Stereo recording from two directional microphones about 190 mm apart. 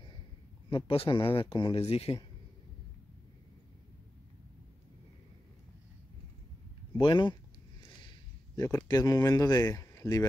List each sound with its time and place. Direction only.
0.7 s speech: 30° left (ahead or behind)
7.0 s speech: 25° left (ahead or behind)
8.0 s a sound: 25° left (ahead or behind)
8.6 s speech: 15° left (ahead or behind)